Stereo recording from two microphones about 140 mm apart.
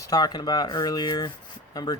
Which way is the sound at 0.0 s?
25° left (ahead or behind).